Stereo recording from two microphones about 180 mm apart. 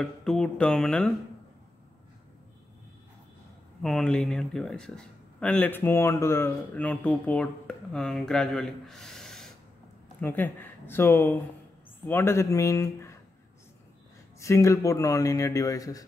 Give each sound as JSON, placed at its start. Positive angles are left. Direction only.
{"t": 0.0, "sound": "speech", "side_deg": 5}
{"t": 3.8, "sound": "speech", "side_deg": 5}
{"t": 14.4, "sound": "speech", "side_deg": 15}